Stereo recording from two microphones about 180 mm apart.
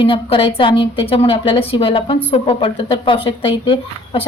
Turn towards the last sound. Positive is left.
turn(degrees=30)  # may be behind; listen again after turning